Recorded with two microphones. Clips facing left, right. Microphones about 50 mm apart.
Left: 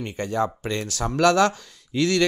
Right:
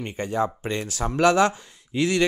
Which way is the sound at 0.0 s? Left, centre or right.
Right.